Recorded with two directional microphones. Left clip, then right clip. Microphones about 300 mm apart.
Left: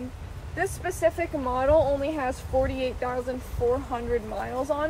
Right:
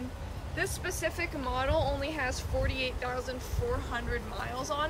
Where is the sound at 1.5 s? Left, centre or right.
Centre.